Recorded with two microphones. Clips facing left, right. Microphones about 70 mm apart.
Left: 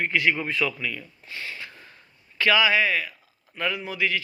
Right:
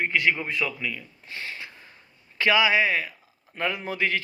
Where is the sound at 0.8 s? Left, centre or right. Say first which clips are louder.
Even; centre.